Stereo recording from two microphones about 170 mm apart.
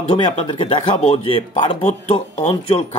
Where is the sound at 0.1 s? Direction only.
35° left (ahead or behind).